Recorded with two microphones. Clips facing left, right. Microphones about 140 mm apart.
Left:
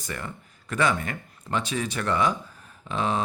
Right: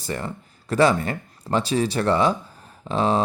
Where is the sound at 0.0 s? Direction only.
30° right (ahead or behind).